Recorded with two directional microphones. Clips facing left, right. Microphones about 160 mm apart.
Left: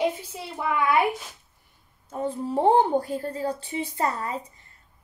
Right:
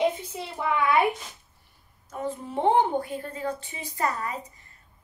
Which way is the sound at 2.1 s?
30° left (ahead or behind).